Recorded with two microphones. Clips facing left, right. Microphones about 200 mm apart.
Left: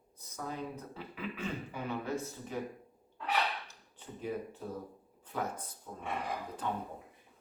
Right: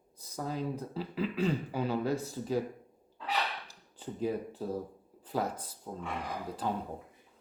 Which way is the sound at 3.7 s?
35° right (ahead or behind).